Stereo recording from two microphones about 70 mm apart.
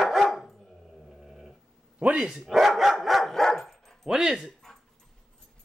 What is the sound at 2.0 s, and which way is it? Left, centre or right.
Speech, centre.